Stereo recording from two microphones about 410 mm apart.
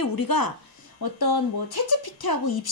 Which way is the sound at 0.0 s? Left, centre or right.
Left.